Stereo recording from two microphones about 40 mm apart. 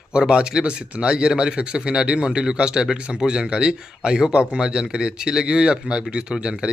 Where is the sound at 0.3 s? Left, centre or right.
Right.